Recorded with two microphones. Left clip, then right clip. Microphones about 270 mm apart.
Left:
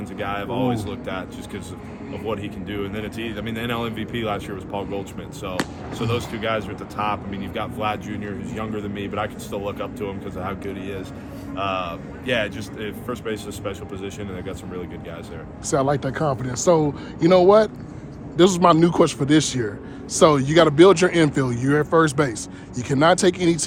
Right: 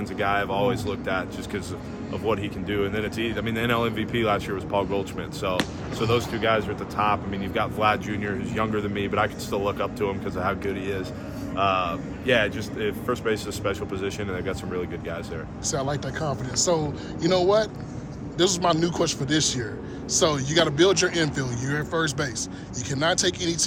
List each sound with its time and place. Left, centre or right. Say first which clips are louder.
0.2 s speech: right 2 dB; centre
15.7 s a man's voice: left 8 dB; left